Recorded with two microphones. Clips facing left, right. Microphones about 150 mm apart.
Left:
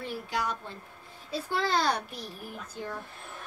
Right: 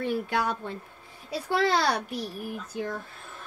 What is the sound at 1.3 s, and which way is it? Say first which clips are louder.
A woman's voice: right 4 dB; 70° right (ahead or behind).